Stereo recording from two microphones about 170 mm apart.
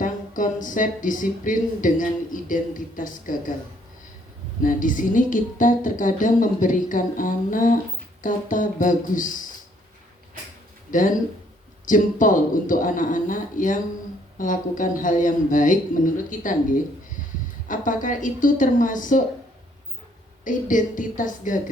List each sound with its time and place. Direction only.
0.0 s speech: 50° left (ahead or behind)
4.6 s speech: 50° left (ahead or behind)
10.9 s speech: 50° left (ahead or behind)
17.7 s speech: 50° left (ahead or behind)
20.4 s speech: 50° left (ahead or behind)